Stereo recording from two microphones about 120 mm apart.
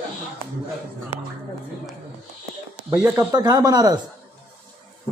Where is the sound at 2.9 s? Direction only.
25° right (ahead or behind).